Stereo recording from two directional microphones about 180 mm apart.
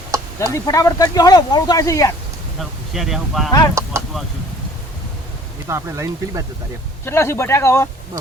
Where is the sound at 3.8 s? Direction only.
15° right (ahead or behind).